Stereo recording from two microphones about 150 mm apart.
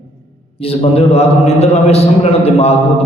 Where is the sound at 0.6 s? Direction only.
40° left (ahead or behind).